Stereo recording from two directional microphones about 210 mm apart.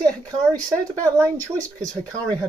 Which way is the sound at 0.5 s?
15° right (ahead or behind).